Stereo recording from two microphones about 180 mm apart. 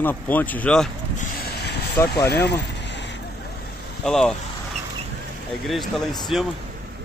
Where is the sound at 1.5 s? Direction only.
65° left (ahead or behind).